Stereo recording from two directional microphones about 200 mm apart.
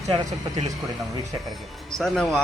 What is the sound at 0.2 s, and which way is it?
Speech, 20° right (ahead or behind).